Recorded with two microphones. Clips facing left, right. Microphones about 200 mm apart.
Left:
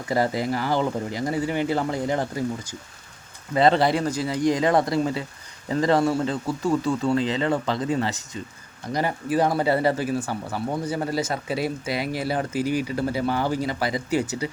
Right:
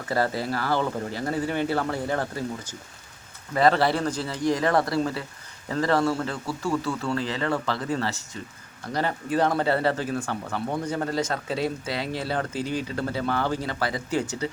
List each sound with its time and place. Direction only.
0.1 s speech: 15° left (ahead or behind)